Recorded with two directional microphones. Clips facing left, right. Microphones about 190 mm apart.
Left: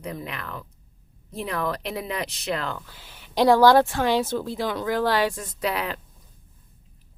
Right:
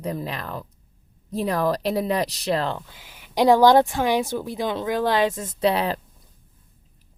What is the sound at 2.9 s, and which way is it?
A woman's voice, 15° right (ahead or behind).